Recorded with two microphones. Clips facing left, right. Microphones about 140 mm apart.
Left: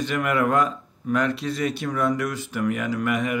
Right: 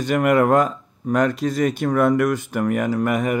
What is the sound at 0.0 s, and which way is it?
Speech, 45° right (ahead or behind).